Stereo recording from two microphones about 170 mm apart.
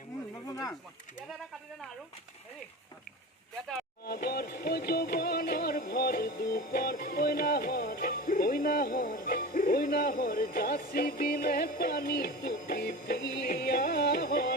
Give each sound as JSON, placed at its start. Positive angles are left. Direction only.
{"t": 0.5, "sound": "speech", "side_deg": 20}
{"t": 4.0, "sound": "music", "side_deg": 65}